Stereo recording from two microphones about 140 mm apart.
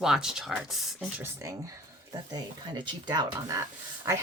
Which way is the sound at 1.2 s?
20° right (ahead or behind).